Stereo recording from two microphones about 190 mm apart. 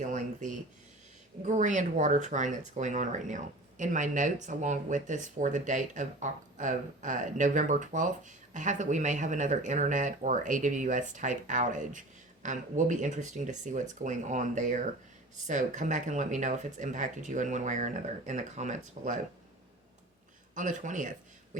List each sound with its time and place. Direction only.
0.0 s a sound: 40° right (ahead or behind)
1.5 s speech: 40° right (ahead or behind)
20.6 s speech: 45° right (ahead or behind)